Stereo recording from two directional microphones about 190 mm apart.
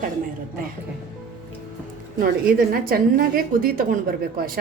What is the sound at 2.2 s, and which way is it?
A woman's voice, 50° right (ahead or behind).